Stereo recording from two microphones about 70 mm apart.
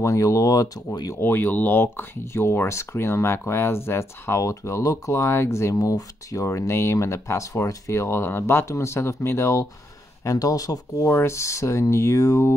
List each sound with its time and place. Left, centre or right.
0.0 s speech: left
1.2 s speech: left
10.2 s speech: left
11.1 s speech: left